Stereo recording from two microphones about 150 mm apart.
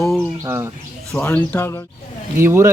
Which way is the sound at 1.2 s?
15° left (ahead or behind).